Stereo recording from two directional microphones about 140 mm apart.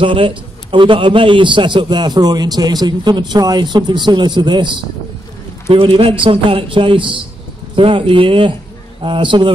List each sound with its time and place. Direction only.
0.0 s a man's voice: 40° right (ahead or behind)